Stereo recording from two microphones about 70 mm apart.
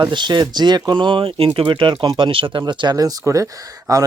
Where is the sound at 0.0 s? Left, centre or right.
Right.